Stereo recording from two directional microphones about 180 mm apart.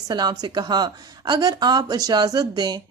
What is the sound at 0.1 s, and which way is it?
Speech, 25° right (ahead or behind).